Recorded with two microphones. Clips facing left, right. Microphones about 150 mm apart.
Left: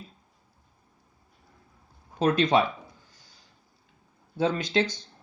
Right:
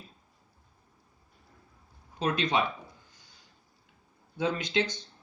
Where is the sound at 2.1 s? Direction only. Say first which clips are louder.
Left 6 dB; 40° left (ahead or behind).